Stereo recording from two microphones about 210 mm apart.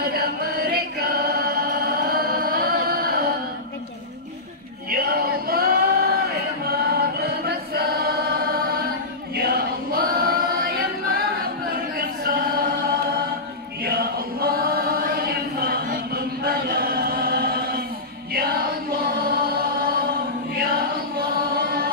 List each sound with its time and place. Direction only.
0.0 s choir: 45° right (ahead or behind)
4.8 s choir: 45° right (ahead or behind)
11.7 s chant: 45° right (ahead or behind)